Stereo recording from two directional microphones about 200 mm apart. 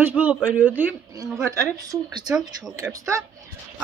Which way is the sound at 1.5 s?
15° right (ahead or behind).